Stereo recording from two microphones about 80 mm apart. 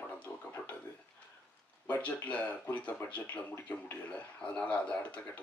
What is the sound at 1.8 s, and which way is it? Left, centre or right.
A man's voice, centre.